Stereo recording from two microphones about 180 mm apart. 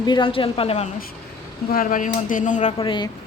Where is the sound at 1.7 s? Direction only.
50° left (ahead or behind).